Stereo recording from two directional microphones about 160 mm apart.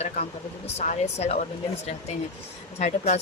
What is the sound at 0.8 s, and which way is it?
Speech, 45° left (ahead or behind).